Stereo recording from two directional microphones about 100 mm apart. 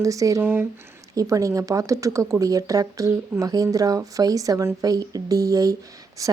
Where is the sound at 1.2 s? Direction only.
35° right (ahead or behind).